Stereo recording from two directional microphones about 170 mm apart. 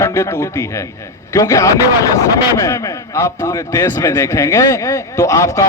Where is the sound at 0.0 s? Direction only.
15° left (ahead or behind).